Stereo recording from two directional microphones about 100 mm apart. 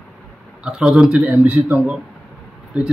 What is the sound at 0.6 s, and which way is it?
A man's voice, 10° right (ahead or behind).